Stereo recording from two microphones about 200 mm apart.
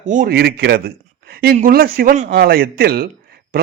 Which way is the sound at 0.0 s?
40° right (ahead or behind).